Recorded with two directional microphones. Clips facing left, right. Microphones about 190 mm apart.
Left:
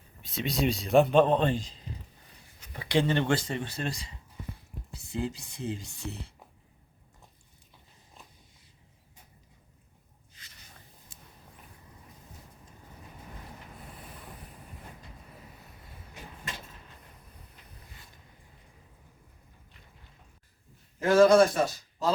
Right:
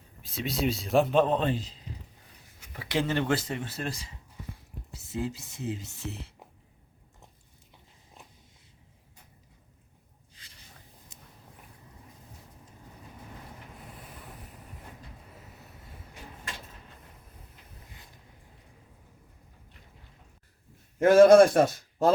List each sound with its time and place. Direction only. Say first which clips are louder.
0.2 s a man's voice: left 1 dB; centre (ahead or behind)
11.1 s a sound: even; 20° right (ahead or behind)
21.0 s a man's voice: right 4 dB; 55° right (ahead or behind)